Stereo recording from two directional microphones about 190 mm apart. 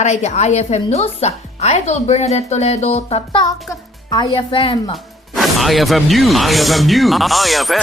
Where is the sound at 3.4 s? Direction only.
20° left (ahead or behind).